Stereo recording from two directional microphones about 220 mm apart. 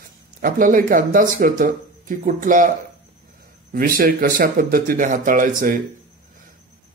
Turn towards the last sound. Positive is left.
turn(degrees=-40)  # may be behind; listen again after turning